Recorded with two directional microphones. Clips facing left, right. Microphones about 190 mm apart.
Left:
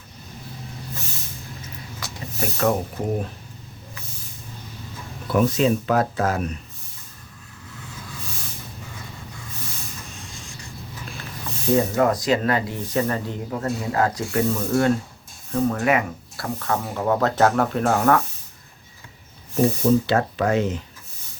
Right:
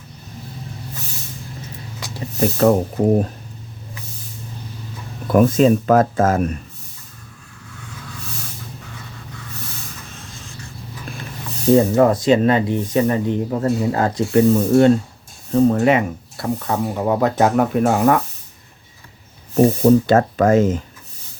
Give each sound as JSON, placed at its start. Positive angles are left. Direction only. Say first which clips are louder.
{"t": 2.0, "sound": "speech", "louder": "right 9 dB", "side_deg": -35}
{"t": 5.3, "sound": "speech", "louder": "right 6 dB", "side_deg": -50}
{"t": 11.9, "sound": "speech", "louder": "right 6 dB", "side_deg": -25}
{"t": 19.5, "sound": "speech", "louder": "right 6 dB", "side_deg": -45}